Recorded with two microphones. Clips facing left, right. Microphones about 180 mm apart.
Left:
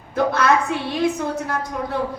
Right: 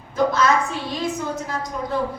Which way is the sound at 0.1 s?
60° left (ahead or behind).